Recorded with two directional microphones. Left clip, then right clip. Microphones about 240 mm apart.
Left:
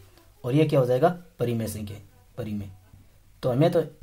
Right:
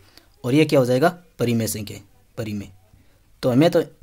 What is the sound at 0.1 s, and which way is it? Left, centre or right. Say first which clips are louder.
Speech: right 6 dB; right.